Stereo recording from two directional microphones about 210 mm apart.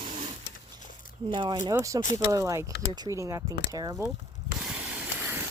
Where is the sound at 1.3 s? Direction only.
20° right (ahead or behind).